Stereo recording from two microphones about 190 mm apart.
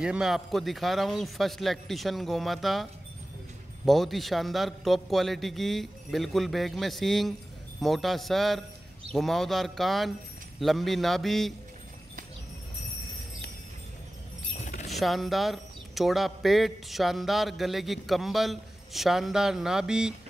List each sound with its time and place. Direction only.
0.0 s speech: 5° right (ahead or behind)
14.6 s jingle bell: 40° left (ahead or behind)
14.9 s speech: centre (ahead or behind)